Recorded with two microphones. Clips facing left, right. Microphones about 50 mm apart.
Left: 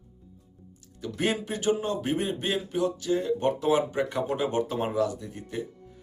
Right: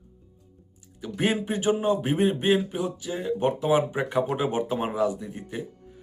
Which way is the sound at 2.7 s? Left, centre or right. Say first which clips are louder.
Left 4 dB; centre.